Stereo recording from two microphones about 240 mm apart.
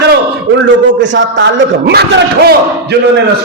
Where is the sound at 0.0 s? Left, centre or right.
Right.